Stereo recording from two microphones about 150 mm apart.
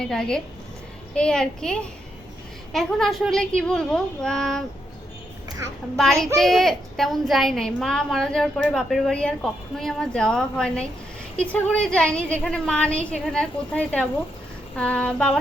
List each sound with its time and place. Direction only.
0.0 s a woman's voice: 5° left (ahead or behind)
6.0 s a woman's voice: centre (ahead or behind)